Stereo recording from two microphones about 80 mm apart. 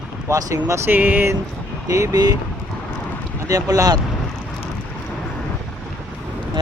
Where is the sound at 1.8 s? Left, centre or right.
Right.